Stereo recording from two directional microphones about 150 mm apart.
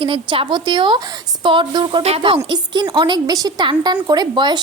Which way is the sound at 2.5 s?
30° right (ahead or behind).